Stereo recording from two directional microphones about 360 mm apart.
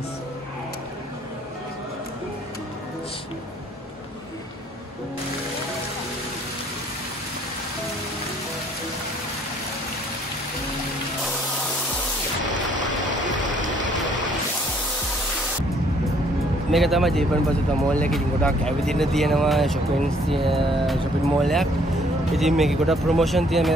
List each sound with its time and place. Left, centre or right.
12.4 s vehicle: right
16.7 s speech: centre